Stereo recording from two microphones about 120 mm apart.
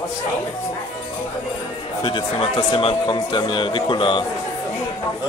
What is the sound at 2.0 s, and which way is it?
Speech, 45° left (ahead or behind).